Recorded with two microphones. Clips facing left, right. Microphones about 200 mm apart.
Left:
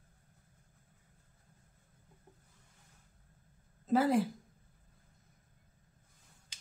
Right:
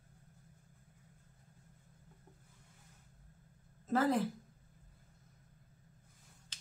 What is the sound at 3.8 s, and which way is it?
Speech, 10° left (ahead or behind).